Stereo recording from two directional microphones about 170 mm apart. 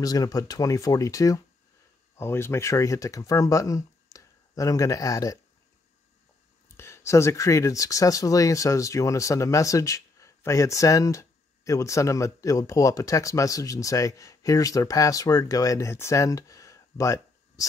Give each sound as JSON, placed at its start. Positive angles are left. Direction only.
{"t": 0.0, "sound": "speech", "side_deg": 20}
{"t": 6.8, "sound": "speech", "side_deg": 15}